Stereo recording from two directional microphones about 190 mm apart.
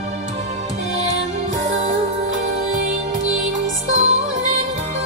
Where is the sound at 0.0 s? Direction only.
35° right (ahead or behind).